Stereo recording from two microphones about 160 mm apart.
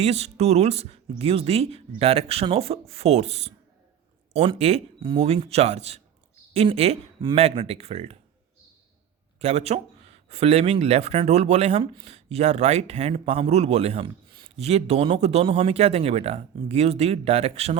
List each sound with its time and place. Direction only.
0.0 s speech: 45° right (ahead or behind)
9.4 s speech: 40° right (ahead or behind)